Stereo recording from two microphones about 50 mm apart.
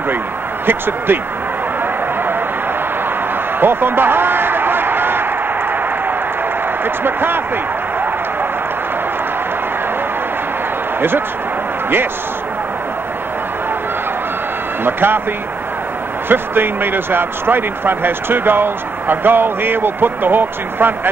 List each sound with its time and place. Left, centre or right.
0.7 s speech: right
3.5 s a sound: right
6.8 s speech: right
11.0 s a man's voice: right
14.9 s speech: right
16.3 s speech: right